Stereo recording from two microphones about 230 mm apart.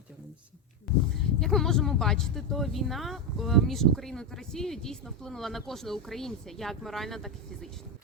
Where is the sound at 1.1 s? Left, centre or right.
Centre.